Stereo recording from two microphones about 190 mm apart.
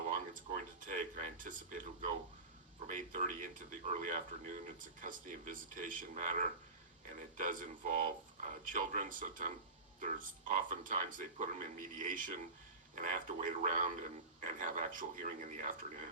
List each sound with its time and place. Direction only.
0.1 s speech: 45° right (ahead or behind)
2.9 s a man's voice: 45° right (ahead or behind)